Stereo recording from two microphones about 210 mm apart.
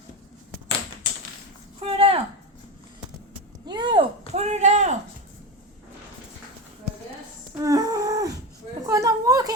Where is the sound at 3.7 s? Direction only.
20° right (ahead or behind).